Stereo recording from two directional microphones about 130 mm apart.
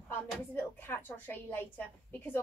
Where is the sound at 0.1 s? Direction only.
15° left (ahead or behind).